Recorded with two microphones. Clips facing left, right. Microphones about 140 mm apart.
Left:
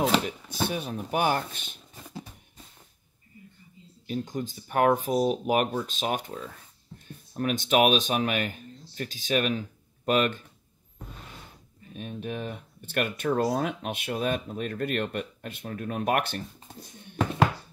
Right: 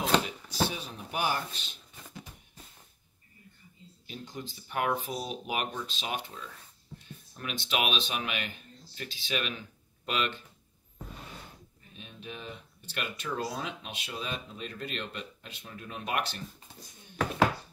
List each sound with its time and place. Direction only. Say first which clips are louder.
0.5 s speech: left 2 dB; 55° left (ahead or behind)
4.1 s speech: left 10 dB; 45° left (ahead or behind)
11.9 s speech: left 10 dB; 55° left (ahead or behind)